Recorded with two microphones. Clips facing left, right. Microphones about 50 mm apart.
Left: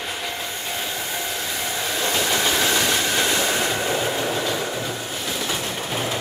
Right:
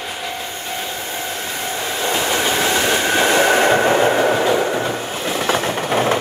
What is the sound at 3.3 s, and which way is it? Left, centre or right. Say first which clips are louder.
Train: right 9 dB; right.